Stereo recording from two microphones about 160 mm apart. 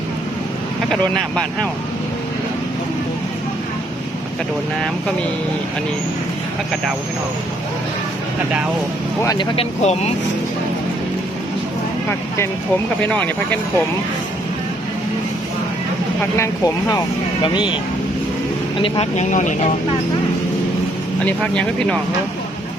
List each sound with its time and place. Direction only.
0.9 s speech: 5° left (ahead or behind)
9.2 s speech: 25° left (ahead or behind)
9.6 s speech: 40° left (ahead or behind)
13.0 s speech: 10° left (ahead or behind)
16.4 s speech: 20° left (ahead or behind)
18.8 s speech: 40° left (ahead or behind)
21.2 s speech: 5° left (ahead or behind)